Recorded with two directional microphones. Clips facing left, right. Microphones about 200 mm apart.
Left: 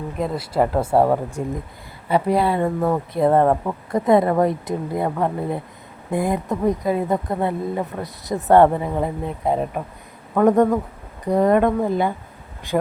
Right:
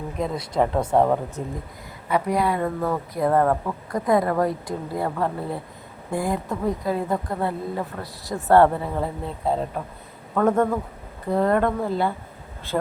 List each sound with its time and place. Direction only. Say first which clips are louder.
0.2 s speech: left 2 dB; 5° left (ahead or behind)
2.0 s speech: left 3 dB; 30° left (ahead or behind); by 12.9 s 15° left (ahead or behind)